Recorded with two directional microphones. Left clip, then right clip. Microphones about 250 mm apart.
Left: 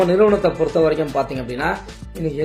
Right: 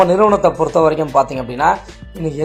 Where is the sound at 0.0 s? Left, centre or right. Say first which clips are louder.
Right 4 dB; centre.